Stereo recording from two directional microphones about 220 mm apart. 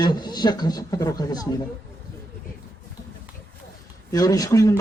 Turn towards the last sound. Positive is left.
turn(degrees=15)  # may be behind; listen again after turning